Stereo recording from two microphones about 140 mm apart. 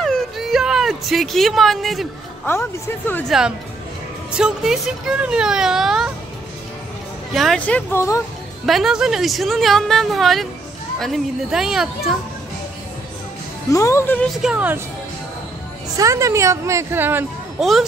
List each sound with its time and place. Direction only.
0.0 s a sound: centre (ahead or behind)
2.5 s speech: 15° left (ahead or behind)
3.3 s speech: 5° right (ahead or behind)
7.3 s speech: 5° left (ahead or behind)
8.6 s speech: centre (ahead or behind)
13.7 s speech: 20° left (ahead or behind)
14.4 s speech: 10° right (ahead or behind)
16.0 s a woman's voice: 20° right (ahead or behind)
17.6 s speech: centre (ahead or behind)